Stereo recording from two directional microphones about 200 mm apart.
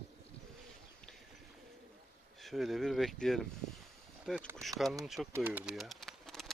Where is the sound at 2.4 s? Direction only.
Centre (ahead or behind).